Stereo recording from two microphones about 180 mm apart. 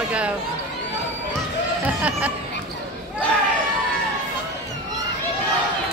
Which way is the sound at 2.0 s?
5° right (ahead or behind).